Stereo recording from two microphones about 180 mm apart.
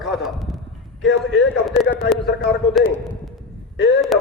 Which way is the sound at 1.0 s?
85° left.